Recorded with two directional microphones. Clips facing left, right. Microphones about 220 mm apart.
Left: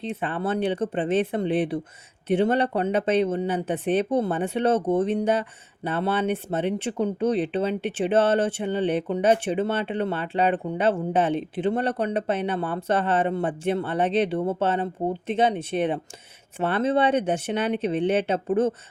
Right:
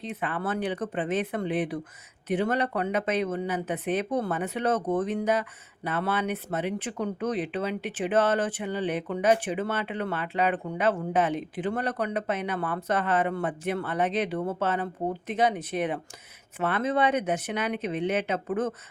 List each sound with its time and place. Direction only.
0.0 s speech: 30° left (ahead or behind)